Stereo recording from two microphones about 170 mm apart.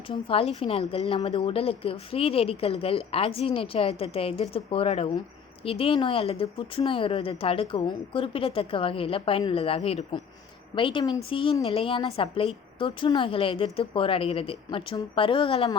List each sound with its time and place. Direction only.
0.1 s speech: 35° left (ahead or behind)